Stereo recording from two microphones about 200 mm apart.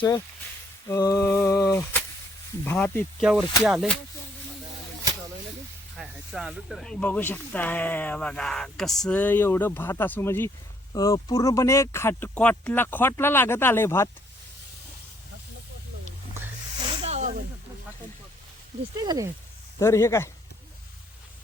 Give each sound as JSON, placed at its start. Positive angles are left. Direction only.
{"t": 0.9, "sound": "speech", "side_deg": 15}
{"t": 6.0, "sound": "speech", "side_deg": 0}
{"t": 17.0, "sound": "snake", "side_deg": -35}
{"t": 18.9, "sound": "speech", "side_deg": -15}
{"t": 19.8, "sound": "speech", "side_deg": 15}